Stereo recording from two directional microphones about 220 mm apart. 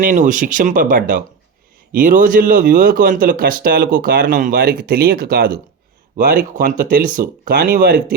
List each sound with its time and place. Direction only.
0.0 s speech: 35° right (ahead or behind)